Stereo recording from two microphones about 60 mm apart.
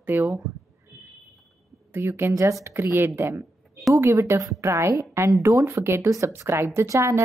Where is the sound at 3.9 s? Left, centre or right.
Right.